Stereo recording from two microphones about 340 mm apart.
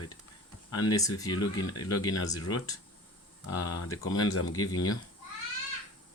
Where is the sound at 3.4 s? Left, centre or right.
Left.